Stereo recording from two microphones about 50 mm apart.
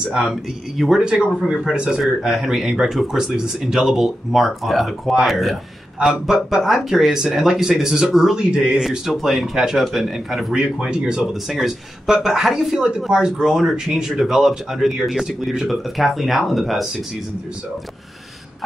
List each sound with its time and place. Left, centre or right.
0.1 s a man's voice: centre
1.0 s speech: centre
8.4 s speech: centre
8.8 s a man's voice: centre
10.5 s a man's voice: centre
13.5 s speech: centre